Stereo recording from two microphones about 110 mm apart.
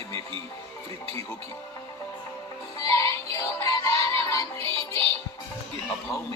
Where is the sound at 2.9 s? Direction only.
25° left (ahead or behind).